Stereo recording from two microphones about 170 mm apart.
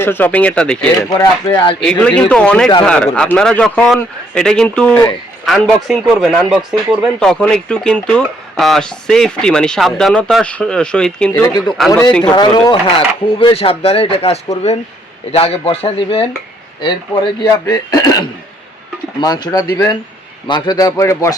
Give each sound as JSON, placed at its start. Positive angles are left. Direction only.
{"t": 0.0, "sound": "speech", "side_deg": 10}
{"t": 1.1, "sound": "a man's voice", "side_deg": 20}
{"t": 1.8, "sound": "a man's voice", "side_deg": 5}
{"t": 12.3, "sound": "speech", "side_deg": 25}
{"t": 17.4, "sound": "a man's voice", "side_deg": 20}